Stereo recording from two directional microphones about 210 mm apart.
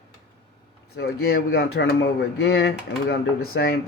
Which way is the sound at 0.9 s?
50° left (ahead or behind).